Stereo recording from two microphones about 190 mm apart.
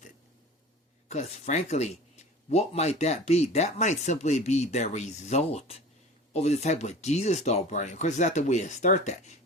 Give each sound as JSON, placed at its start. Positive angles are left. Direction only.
{"t": 1.1, "sound": "a man's voice", "side_deg": 35}